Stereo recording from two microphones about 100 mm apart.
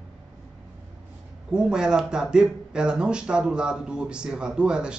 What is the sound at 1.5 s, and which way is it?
Speech, 5° right (ahead or behind).